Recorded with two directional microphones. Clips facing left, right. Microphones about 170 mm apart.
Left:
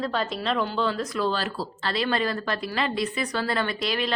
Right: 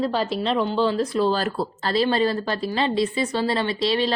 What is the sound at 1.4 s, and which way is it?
Speech, 50° right (ahead or behind).